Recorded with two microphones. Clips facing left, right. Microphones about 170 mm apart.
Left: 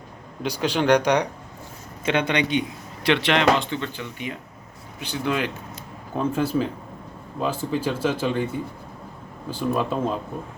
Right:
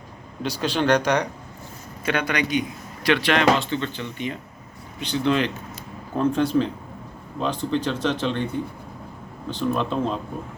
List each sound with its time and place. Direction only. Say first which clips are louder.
0.4 s speech: left 1 dB; 10° left (ahead or behind)
2.0 s speech: left 2 dB; 25° left (ahead or behind); by 10.2 s 5° left (ahead or behind)